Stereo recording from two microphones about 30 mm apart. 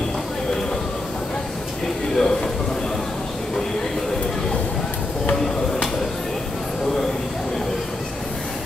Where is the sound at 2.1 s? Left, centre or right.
Left.